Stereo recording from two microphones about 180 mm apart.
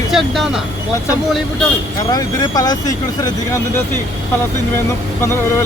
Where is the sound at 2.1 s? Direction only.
20° left (ahead or behind).